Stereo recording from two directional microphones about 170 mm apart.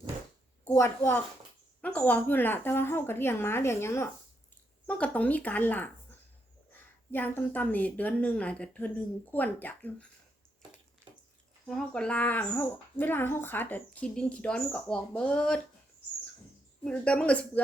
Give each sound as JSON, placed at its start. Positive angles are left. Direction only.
{"t": 0.7, "sound": "speech", "side_deg": 15}
{"t": 11.7, "sound": "speech", "side_deg": 5}
{"t": 16.8, "sound": "speech", "side_deg": 5}